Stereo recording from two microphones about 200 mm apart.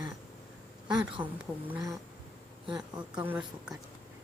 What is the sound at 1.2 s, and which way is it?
Speech, 20° right (ahead or behind).